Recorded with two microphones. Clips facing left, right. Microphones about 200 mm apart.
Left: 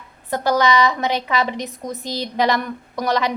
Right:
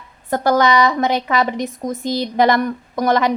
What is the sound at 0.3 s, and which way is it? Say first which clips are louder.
A woman's voice: right 3 dB; 50° right (ahead or behind).